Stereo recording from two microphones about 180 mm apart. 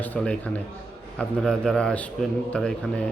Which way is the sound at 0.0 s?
10° left (ahead or behind).